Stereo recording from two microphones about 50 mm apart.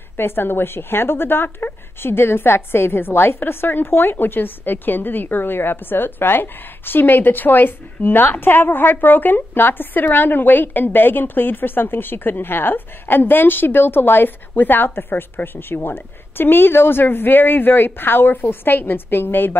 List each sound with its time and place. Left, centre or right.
0.2 s a woman's voice: left